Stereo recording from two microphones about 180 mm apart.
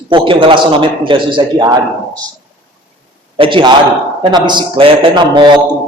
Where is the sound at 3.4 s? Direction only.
30° right (ahead or behind).